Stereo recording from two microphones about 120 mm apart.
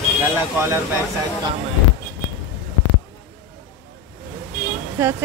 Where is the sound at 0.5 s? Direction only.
20° right (ahead or behind).